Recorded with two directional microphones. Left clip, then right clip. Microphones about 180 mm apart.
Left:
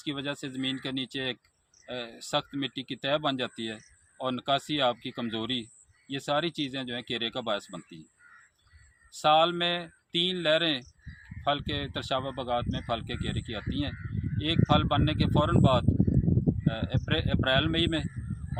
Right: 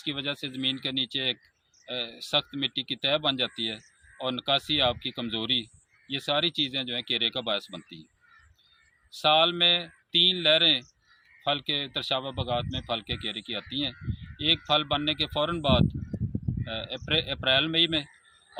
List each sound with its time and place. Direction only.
0.0 s speech: 10° right (ahead or behind)
9.2 s speech: 10° right (ahead or behind)